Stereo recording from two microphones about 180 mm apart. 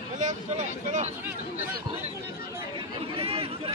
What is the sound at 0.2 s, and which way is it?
Speech, 40° right (ahead or behind).